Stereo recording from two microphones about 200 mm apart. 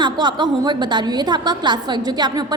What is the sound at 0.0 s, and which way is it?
A woman's voice, 20° right (ahead or behind).